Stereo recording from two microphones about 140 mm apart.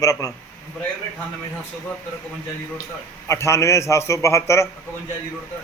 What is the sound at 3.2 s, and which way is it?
A man's voice, 20° left (ahead or behind).